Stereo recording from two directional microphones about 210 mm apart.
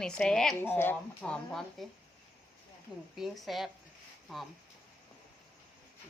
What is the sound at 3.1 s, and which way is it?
Speech, centre (ahead or behind).